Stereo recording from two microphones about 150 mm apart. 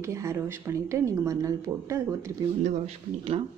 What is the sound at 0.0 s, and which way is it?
Speech, 20° right (ahead or behind).